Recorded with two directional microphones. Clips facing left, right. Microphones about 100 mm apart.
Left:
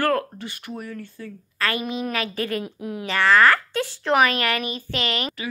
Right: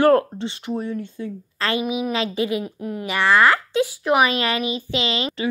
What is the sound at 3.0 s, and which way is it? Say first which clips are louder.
Speech: even; 15° right (ahead or behind).